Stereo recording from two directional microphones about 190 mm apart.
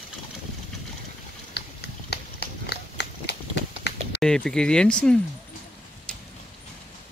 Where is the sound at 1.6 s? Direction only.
65° left (ahead or behind).